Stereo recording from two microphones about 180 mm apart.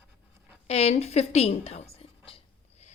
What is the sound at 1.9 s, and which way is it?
Whispering, 30° left (ahead or behind).